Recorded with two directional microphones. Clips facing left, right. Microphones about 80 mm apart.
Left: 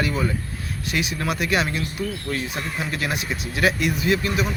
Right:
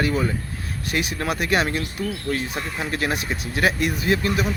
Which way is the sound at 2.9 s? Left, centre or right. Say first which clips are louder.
Right 4 dB; right.